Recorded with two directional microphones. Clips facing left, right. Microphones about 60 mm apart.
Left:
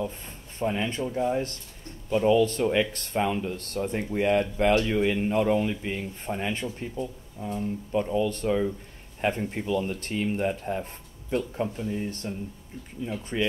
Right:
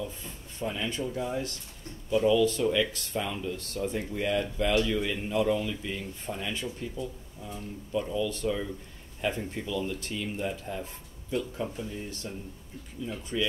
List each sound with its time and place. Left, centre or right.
0.0 s speech: left